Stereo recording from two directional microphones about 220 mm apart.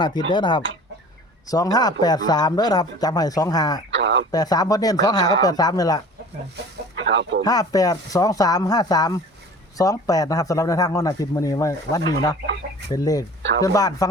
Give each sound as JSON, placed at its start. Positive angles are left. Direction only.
{"t": 0.0, "sound": "speech", "side_deg": 20}
{"t": 3.9, "sound": "speech", "side_deg": -55}
{"t": 4.3, "sound": "speech", "side_deg": 15}
{"t": 6.9, "sound": "speech", "side_deg": -55}
{"t": 7.4, "sound": "speech", "side_deg": 15}